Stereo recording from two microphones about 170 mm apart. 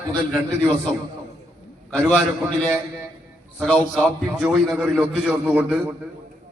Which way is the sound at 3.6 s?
5° left (ahead or behind).